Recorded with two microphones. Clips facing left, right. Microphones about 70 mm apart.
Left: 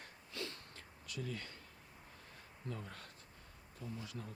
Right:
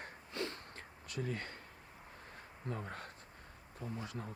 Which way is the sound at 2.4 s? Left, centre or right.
Right.